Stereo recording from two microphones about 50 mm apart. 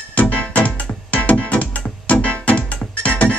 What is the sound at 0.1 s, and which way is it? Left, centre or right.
Music, left.